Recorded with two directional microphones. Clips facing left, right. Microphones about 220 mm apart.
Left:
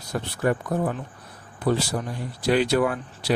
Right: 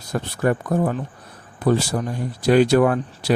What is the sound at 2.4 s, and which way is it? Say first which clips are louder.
Speech: right 6 dB; 45° right (ahead or behind).